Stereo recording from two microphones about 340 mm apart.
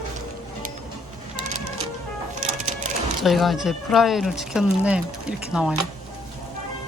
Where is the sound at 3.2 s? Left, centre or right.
Centre.